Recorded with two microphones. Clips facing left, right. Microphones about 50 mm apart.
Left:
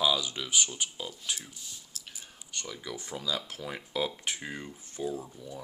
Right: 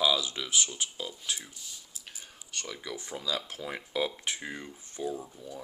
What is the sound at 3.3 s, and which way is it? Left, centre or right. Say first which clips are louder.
Speech: right 1 dB; right.